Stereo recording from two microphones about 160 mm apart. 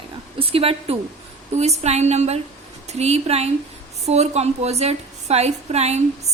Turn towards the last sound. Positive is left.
turn(degrees=-40)  # may be behind; listen again after turning